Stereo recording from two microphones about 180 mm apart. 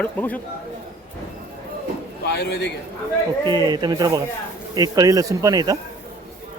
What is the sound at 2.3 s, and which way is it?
Speech, 70° left (ahead or behind).